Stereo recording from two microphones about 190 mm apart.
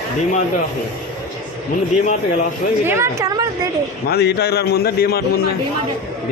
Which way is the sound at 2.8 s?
15° right (ahead or behind).